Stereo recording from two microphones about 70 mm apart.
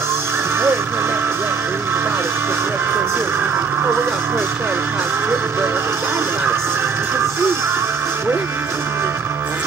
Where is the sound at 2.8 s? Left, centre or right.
Right.